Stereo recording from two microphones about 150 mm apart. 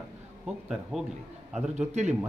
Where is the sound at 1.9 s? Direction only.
50° right (ahead or behind).